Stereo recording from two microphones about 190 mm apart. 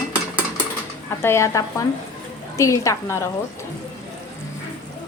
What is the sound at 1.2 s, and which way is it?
Speech, 15° left (ahead or behind).